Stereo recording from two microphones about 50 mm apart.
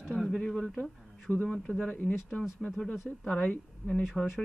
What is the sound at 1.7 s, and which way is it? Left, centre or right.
Speech, left.